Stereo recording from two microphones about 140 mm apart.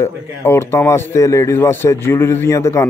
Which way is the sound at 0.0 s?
15° left (ahead or behind).